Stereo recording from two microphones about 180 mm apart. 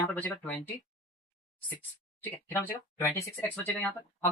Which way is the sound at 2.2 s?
15° left (ahead or behind).